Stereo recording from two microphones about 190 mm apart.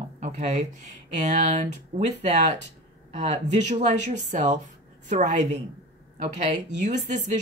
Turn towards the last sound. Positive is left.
turn(degrees=-40)  # may be behind; listen again after turning